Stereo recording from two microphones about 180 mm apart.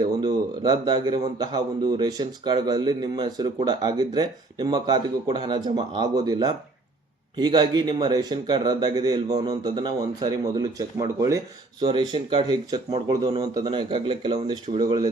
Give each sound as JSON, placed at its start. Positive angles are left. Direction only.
{"t": 0.6, "sound": "speech", "side_deg": -20}